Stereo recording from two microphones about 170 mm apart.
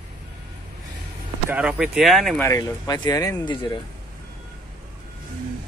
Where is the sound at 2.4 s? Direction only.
20° left (ahead or behind).